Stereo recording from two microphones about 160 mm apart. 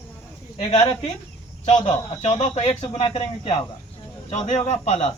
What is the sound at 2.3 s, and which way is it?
Speech, 35° left (ahead or behind).